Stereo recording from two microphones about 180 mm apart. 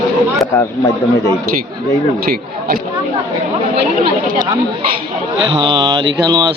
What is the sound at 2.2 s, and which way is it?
Speech, 55° right (ahead or behind).